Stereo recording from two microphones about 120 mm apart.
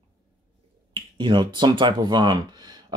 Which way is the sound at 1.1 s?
40° right (ahead or behind).